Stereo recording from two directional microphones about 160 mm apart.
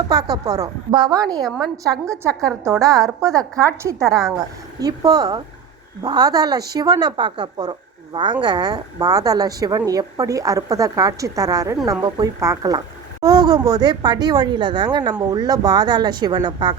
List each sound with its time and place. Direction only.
0.1 s speech: 25° right (ahead or behind)